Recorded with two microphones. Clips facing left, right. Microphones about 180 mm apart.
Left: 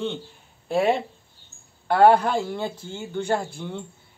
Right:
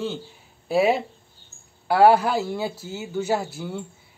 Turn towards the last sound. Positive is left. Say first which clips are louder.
# right 1 dB
turn(degrees=-5)  # may be behind; listen again after turning